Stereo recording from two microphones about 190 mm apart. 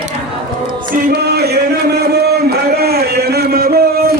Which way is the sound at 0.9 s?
55° right (ahead or behind).